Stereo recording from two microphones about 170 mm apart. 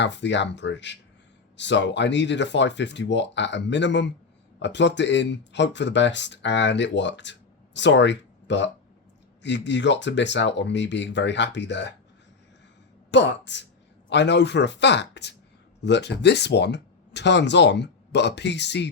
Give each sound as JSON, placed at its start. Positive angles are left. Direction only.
{"t": 0.0, "sound": "speech", "side_deg": 90}
{"t": 13.1, "sound": "speech", "side_deg": 90}